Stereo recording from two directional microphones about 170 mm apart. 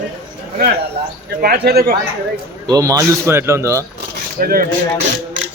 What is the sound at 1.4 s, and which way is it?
Speech, 70° right (ahead or behind).